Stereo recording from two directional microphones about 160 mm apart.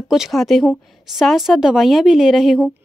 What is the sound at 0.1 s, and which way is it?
A woman's voice, centre (ahead or behind).